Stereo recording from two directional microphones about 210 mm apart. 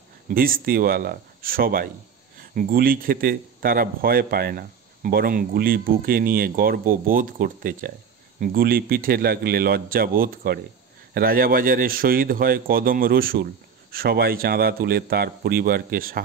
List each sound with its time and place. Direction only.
0.3 s a man's voice: 45° right (ahead or behind)